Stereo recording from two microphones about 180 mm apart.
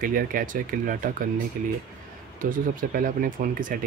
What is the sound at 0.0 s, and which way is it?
Speech, 50° right (ahead or behind).